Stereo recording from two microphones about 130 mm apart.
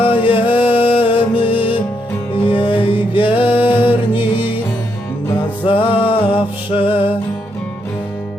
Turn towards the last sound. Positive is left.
turn(degrees=45)  # may be behind; listen again after turning